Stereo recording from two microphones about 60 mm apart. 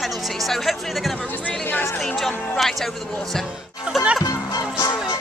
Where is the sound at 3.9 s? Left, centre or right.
Centre.